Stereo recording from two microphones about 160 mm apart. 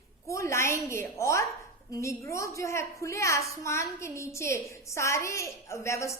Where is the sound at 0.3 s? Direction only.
20° left (ahead or behind).